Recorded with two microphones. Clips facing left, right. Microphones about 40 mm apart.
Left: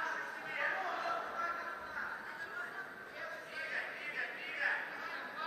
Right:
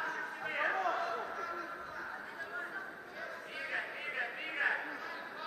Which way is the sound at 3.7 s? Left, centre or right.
Right.